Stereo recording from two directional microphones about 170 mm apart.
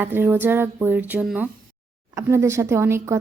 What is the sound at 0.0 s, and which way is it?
A woman's voice, 10° right (ahead or behind).